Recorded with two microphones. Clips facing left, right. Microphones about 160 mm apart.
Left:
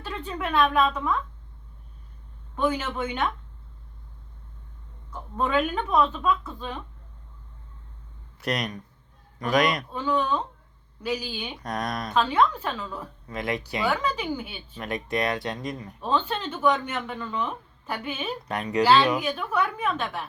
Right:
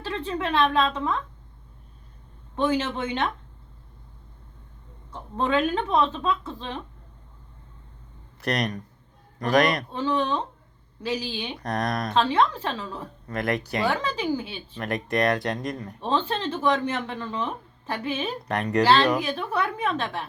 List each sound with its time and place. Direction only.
0.0 s a woman's voice: 30° right (ahead or behind)
2.6 s speech: 25° right (ahead or behind)
5.1 s speech: 25° right (ahead or behind)
8.4 s speech: 35° right (ahead or behind)
13.2 s speech: 50° right (ahead or behind)
13.9 s speech: 30° right (ahead or behind)
14.8 s speech: 45° right (ahead or behind)
16.0 s speech: 30° right (ahead or behind)
18.4 s speech: 55° right (ahead or behind)
18.8 s speech: 40° right (ahead or behind)